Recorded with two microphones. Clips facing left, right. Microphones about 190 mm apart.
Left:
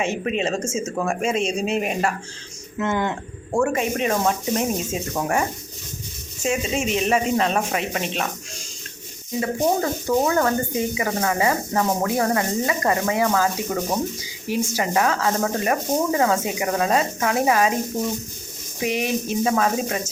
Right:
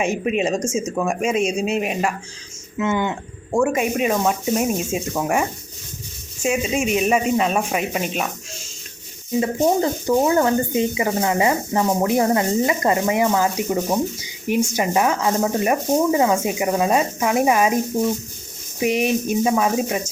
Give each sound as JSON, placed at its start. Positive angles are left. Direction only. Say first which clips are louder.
{"t": 0.0, "sound": "speech", "louder": "right 3 dB", "side_deg": -10}
{"t": 9.4, "sound": "speech", "louder": "right 3 dB", "side_deg": -20}
{"t": 18.8, "sound": "speech", "louder": "right 4 dB", "side_deg": -20}